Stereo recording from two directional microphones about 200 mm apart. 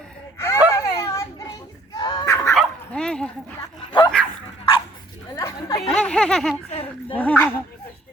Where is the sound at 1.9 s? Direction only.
20° left (ahead or behind).